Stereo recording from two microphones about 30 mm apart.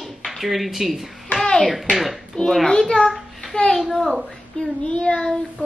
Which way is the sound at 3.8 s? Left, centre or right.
Centre.